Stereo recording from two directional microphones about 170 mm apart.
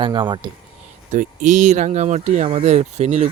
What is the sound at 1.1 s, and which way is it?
Speech, 45° right (ahead or behind).